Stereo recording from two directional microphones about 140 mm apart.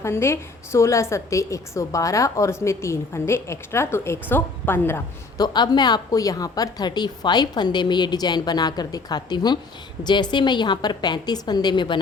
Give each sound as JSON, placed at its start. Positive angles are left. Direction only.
{"t": 0.0, "sound": "a woman's voice", "side_deg": 20}
{"t": 5.4, "sound": "a woman's voice", "side_deg": 30}